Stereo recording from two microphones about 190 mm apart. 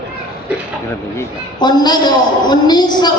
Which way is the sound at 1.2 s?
20° left (ahead or behind).